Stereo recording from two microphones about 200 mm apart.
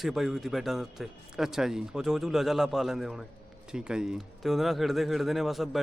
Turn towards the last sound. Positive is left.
turn(degrees=0)  # may be behind; listen again after turning